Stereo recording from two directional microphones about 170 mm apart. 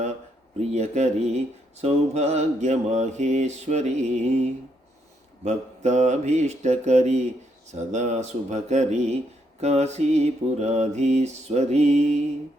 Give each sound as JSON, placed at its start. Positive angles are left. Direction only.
{"t": 0.7, "sound": "mantra", "side_deg": -40}